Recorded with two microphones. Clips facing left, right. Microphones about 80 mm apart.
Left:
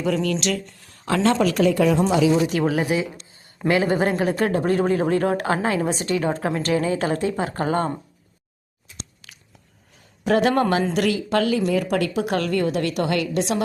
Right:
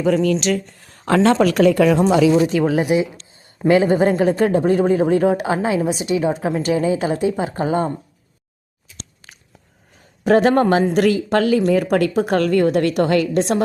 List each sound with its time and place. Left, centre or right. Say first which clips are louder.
0.0 s speech: right 5 dB; right
1.0 s a woman's voice: right 5 dB; right
2.4 s a woman's voice: right 4 dB; right
9.2 s biting: right 3 dB; right
10.2 s a woman's voice: right 5 dB; right